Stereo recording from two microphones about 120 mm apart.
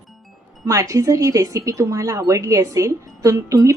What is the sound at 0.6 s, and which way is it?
Speech, 25° right (ahead or behind).